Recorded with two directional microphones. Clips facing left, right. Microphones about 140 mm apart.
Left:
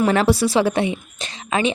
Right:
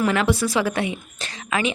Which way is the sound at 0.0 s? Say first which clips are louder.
Left 4 dB; 35° left (ahead or behind).